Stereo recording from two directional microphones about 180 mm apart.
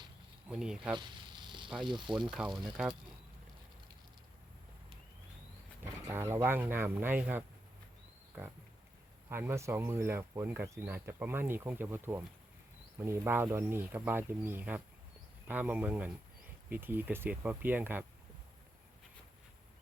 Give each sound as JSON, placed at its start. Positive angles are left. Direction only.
{"t": 0.4, "sound": "speech", "side_deg": -5}
{"t": 1.5, "sound": "snake", "side_deg": -25}
{"t": 1.8, "sound": "speech", "side_deg": -25}
{"t": 2.3, "sound": "speech", "side_deg": 0}
{"t": 5.8, "sound": "speech", "side_deg": -15}
{"t": 9.3, "sound": "speech", "side_deg": -15}